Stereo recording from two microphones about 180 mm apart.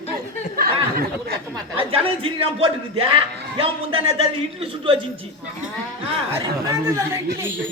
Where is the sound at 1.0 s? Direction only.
60° right (ahead or behind).